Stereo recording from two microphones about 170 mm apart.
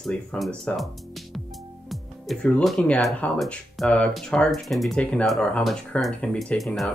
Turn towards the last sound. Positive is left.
turn(degrees=0)  # may be behind; listen again after turning